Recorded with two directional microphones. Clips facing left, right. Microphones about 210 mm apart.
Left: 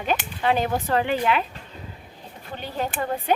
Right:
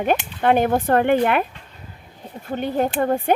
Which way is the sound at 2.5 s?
50° right (ahead or behind).